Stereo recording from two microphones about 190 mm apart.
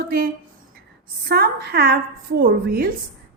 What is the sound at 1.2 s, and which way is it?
A woman's voice, 55° right (ahead or behind).